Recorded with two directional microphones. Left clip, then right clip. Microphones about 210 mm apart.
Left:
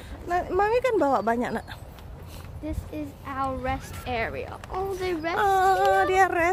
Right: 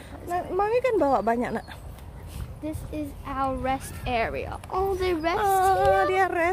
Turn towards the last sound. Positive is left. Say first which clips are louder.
# left 1 dB
turn(degrees=0)  # may be behind; listen again after turning